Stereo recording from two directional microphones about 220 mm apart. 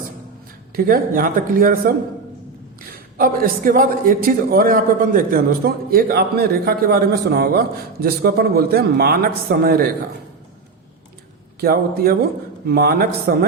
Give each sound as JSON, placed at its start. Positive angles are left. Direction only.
{"t": 0.8, "sound": "speech", "side_deg": -40}
{"t": 3.2, "sound": "a man's voice", "side_deg": -40}
{"t": 11.6, "sound": "a man's voice", "side_deg": -45}